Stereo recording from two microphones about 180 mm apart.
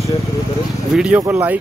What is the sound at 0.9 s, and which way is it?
Speech, 5° right (ahead or behind).